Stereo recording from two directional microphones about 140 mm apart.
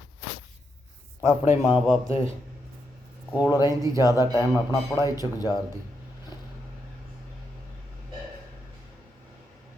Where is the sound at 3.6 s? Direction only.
25° right (ahead or behind).